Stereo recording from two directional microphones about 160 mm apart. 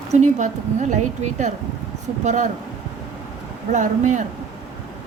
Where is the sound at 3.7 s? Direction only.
50° right (ahead or behind).